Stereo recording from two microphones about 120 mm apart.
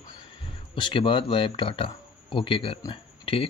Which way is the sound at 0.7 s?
45° left (ahead or behind).